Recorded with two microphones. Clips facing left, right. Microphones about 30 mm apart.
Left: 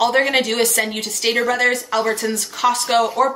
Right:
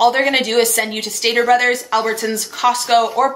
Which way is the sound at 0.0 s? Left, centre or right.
Centre.